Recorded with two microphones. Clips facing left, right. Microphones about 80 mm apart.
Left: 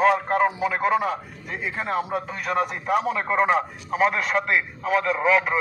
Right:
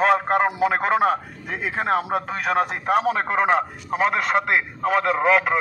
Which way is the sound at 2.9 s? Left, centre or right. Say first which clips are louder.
Right 3 dB; right.